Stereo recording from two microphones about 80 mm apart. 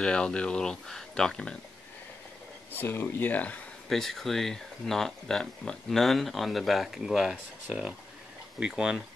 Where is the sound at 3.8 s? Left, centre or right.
Centre.